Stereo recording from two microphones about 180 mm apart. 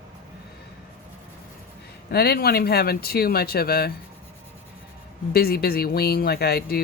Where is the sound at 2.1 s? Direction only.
60° left (ahead or behind).